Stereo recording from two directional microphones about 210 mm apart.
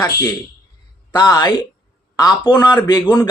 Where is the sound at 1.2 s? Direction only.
20° left (ahead or behind).